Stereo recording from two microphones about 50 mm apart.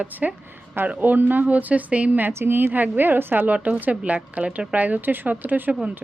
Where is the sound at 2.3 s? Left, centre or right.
Right.